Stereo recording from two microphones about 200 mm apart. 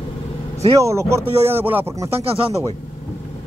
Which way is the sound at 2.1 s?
30° right (ahead or behind).